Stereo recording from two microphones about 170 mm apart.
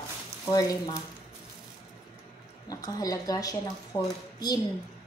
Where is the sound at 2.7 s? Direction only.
20° left (ahead or behind).